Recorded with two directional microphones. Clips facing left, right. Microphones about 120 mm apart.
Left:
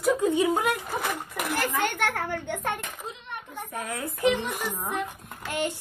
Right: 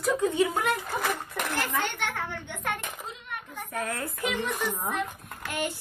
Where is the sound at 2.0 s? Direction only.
45° left (ahead or behind).